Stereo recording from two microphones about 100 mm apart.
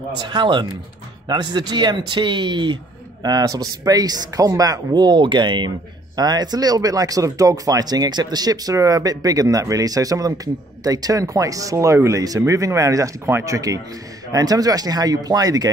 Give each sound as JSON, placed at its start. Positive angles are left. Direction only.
{"t": 0.2, "sound": "speech", "side_deg": -45}
{"t": 3.3, "sound": "speech", "side_deg": -40}